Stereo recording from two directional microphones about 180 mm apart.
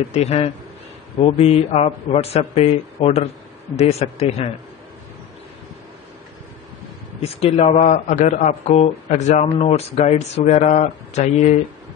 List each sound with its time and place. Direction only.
0.1 s a man's voice: 35° left (ahead or behind)
7.2 s a man's voice: 35° left (ahead or behind)